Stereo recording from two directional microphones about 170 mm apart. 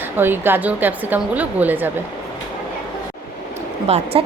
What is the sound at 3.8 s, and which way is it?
Speech, 40° right (ahead or behind).